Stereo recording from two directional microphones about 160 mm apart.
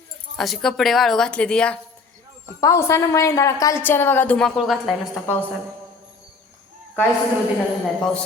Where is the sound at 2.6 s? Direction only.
20° left (ahead or behind); by 5.2 s centre (ahead or behind).